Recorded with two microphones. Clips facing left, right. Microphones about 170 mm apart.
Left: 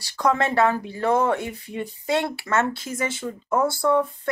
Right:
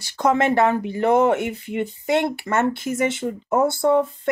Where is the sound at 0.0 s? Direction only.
20° right (ahead or behind).